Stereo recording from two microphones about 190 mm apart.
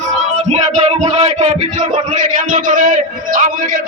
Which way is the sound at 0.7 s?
40° right (ahead or behind).